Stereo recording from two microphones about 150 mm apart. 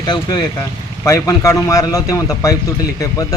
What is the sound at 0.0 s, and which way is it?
A man's voice, 25° left (ahead or behind).